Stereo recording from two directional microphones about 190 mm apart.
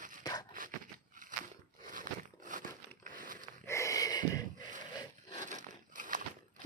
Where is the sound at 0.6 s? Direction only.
45° right (ahead or behind).